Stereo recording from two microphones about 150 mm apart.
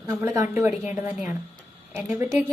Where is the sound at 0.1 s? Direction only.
15° right (ahead or behind).